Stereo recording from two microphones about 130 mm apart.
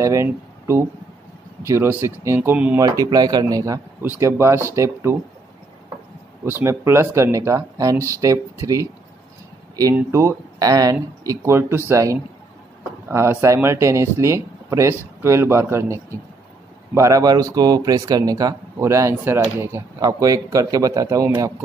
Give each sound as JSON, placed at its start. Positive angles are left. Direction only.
{"t": 0.0, "sound": "speech", "side_deg": -20}
{"t": 2.8, "sound": "speech", "side_deg": -30}
{"t": 6.4, "sound": "speech", "side_deg": -20}
{"t": 9.9, "sound": "speech", "side_deg": -20}